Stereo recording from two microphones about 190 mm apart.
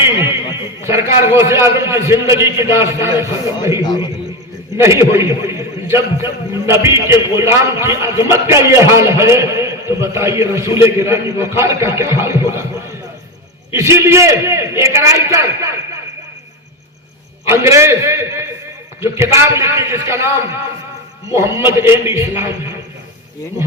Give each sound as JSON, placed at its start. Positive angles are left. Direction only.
{"t": 0.8, "sound": "a man's voice", "side_deg": -15}
{"t": 3.8, "sound": "a man's voice", "side_deg": 25}
{"t": 4.8, "sound": "a man's voice", "side_deg": -15}
{"t": 13.7, "sound": "a man's voice", "side_deg": -15}
{"t": 17.5, "sound": "a man's voice", "side_deg": -15}
{"t": 21.3, "sound": "a man's voice", "side_deg": -15}